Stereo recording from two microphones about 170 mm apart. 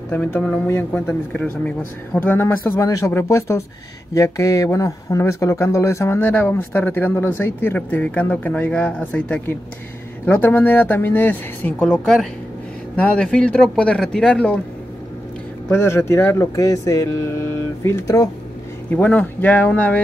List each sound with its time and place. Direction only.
0.1 s speech: 10° left (ahead or behind)
15.7 s speech: 15° left (ahead or behind)